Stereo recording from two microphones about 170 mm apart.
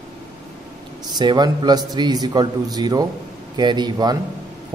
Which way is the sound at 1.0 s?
25° right (ahead or behind).